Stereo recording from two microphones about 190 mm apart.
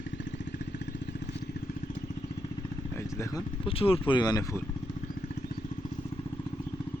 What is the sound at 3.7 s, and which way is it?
Speech, 30° left (ahead or behind).